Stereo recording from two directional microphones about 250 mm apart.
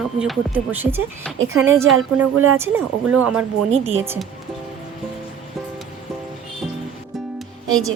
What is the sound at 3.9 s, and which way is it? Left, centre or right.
Speech, centre.